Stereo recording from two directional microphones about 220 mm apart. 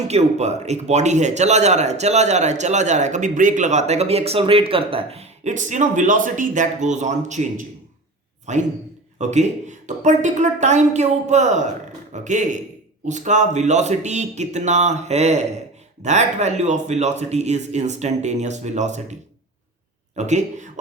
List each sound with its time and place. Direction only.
0.1 s speech: 30° right (ahead or behind)
20.1 s speech: 30° right (ahead or behind)